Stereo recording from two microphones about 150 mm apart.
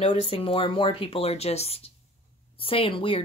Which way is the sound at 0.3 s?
35° left (ahead or behind).